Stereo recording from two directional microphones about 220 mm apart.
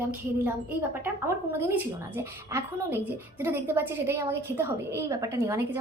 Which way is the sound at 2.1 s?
10° right (ahead or behind).